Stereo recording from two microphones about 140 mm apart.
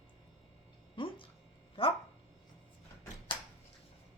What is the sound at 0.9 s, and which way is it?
Speech, 40° left (ahead or behind).